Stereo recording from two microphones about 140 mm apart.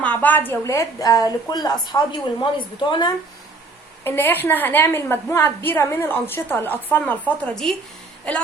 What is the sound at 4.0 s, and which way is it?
A woman's voice, 15° left (ahead or behind).